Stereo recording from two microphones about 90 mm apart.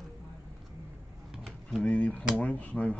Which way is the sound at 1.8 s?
15° left (ahead or behind).